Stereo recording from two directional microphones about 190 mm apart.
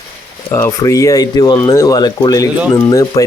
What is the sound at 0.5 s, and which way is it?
Speech, 15° left (ahead or behind).